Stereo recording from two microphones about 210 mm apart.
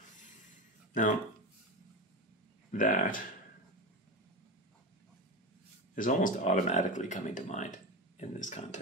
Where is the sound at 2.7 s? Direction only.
40° left (ahead or behind).